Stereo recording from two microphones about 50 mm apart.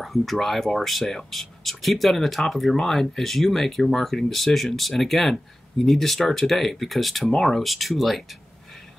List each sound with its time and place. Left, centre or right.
0.0 s speech: centre